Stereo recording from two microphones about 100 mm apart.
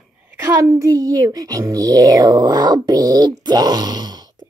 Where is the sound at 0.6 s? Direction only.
35° right (ahead or behind).